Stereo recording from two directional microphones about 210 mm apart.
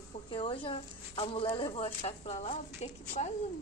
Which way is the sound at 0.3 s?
25° left (ahead or behind).